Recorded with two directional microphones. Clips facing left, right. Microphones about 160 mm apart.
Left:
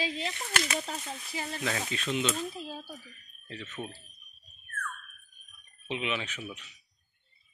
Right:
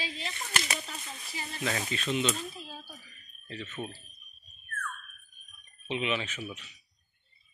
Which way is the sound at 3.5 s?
10° right (ahead or behind).